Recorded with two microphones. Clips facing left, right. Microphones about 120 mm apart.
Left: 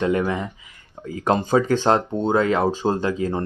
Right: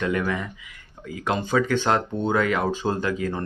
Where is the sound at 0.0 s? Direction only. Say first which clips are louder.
Left 4 dB; 25° left (ahead or behind).